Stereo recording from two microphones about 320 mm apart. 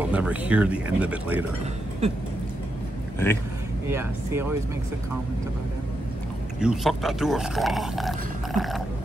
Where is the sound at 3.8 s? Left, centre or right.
Centre.